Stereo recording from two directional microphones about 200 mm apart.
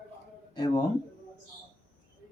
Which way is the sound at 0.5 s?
20° left (ahead or behind).